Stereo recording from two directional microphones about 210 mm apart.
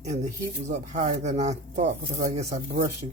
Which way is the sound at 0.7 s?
35° right (ahead or behind).